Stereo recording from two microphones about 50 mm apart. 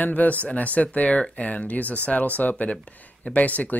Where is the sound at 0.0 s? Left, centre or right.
Left.